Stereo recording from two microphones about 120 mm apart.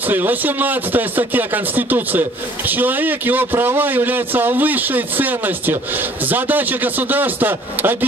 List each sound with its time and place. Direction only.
0.1 s speech: 15° right (ahead or behind)